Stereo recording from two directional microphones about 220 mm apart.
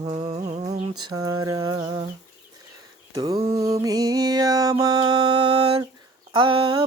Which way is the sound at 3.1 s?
15° right (ahead or behind).